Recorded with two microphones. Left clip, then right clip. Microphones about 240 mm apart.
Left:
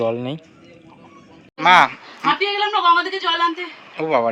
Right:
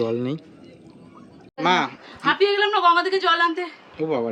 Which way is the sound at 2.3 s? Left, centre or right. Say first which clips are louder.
Even; centre.